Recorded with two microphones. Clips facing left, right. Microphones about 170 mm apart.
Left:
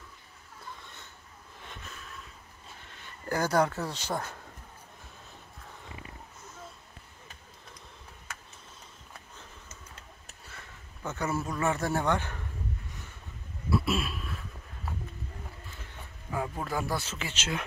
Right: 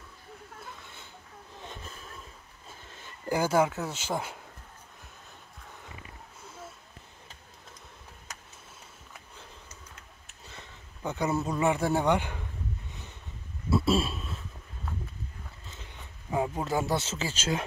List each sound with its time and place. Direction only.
1.6 s snort: 35° right (ahead or behind)
3.3 s speech: 10° right (ahead or behind)
10.5 s speech: 15° right (ahead or behind)
13.7 s a sound: 25° right (ahead or behind)
15.8 s speech: 25° right (ahead or behind)